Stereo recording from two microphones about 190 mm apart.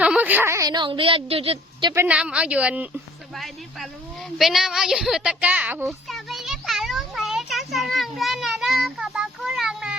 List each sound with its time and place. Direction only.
0.0 s a woman's voice: 5° right (ahead or behind); by 1.9 s 30° right (ahead or behind)
1.9 s a woman's voice: 10° right (ahead or behind)
6.1 s children playing: centre (ahead or behind)